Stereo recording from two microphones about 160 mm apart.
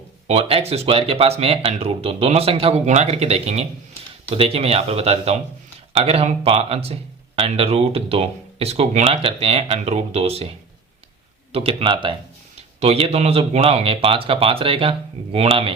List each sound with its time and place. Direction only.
0.3 s speech: 35° right (ahead or behind)
11.5 s speech: 35° right (ahead or behind)